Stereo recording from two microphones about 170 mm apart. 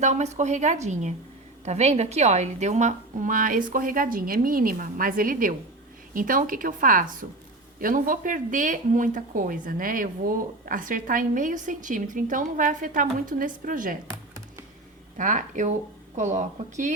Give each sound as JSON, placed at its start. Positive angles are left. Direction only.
{"t": 0.0, "sound": "speech", "side_deg": -40}
{"t": 15.2, "sound": "speech", "side_deg": -50}